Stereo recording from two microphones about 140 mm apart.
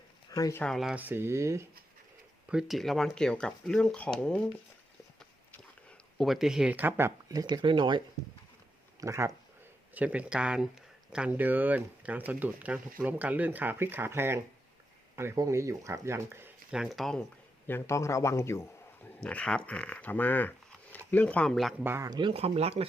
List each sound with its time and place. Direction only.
0.3 s speech: 25° left (ahead or behind)
0.6 s speech: centre (ahead or behind)
0.9 s speech: 15° right (ahead or behind)
2.5 s speech: 5° right (ahead or behind)
6.1 s speech: centre (ahead or behind); by 8.0 s 35° right (ahead or behind)
9.0 s speech: 20° right (ahead or behind)
9.9 s speech: 10° right (ahead or behind)
16.7 s speech: centre (ahead or behind)
17.7 s a man's voice: 15° left (ahead or behind)
19.2 s speech: 10° left (ahead or behind)
21.8 s speech: 20° right (ahead or behind)
22.1 s speech: 40° right (ahead or behind)